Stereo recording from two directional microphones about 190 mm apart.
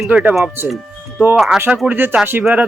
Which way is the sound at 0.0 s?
5° right (ahead or behind).